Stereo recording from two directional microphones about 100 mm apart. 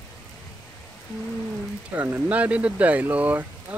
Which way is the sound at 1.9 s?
20° right (ahead or behind).